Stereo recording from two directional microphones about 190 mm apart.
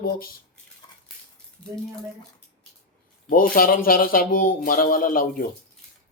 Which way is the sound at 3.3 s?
45° left (ahead or behind).